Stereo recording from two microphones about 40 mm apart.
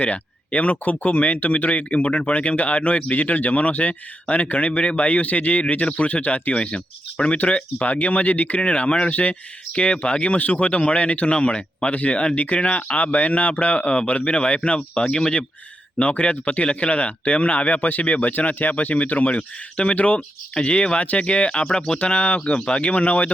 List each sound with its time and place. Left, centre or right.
0.0 s speech: left
10.4 s speech: left
10.7 s speech: left
13.7 s speech: left
14.9 s speech: left
16.0 s speech: left
21.7 s speech: centre
21.9 s speech: left
22.4 s speech: left